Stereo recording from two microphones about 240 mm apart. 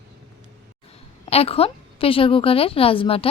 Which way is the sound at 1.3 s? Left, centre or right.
Left.